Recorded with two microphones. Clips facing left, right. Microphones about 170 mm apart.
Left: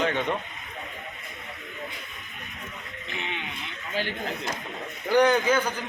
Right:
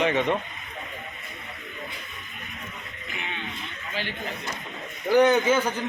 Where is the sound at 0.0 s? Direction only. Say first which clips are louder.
Right 3 dB; centre (ahead or behind).